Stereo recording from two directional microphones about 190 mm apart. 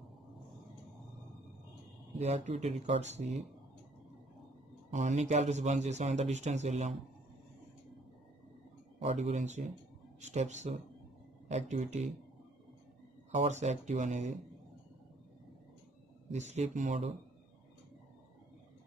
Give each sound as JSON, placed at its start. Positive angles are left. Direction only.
{"t": 2.1, "sound": "a man's voice", "side_deg": -35}
{"t": 4.9, "sound": "a man's voice", "side_deg": -40}
{"t": 9.0, "sound": "a man's voice", "side_deg": -35}
{"t": 13.3, "sound": "a man's voice", "side_deg": -35}
{"t": 16.3, "sound": "a man's voice", "side_deg": -35}